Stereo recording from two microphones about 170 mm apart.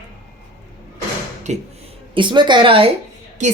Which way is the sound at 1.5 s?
40° right (ahead or behind).